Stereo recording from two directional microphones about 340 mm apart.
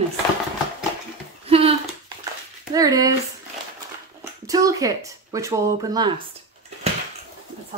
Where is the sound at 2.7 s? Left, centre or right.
Centre.